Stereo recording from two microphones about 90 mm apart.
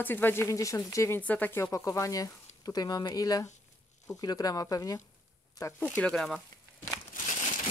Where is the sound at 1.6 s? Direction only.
35° left (ahead or behind).